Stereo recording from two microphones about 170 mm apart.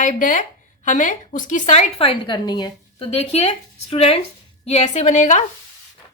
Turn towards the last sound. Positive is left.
turn(degrees=45)  # may be behind; listen again after turning